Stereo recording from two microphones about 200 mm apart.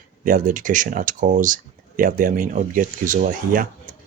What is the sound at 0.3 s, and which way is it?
Speech, 40° right (ahead or behind).